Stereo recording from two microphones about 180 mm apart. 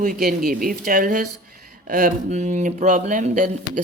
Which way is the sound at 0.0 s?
50° right (ahead or behind).